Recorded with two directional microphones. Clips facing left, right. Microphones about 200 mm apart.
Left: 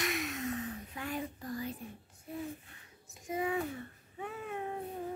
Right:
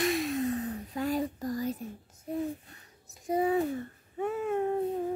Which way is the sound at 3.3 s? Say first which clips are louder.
Right 7 dB; 35° right (ahead or behind).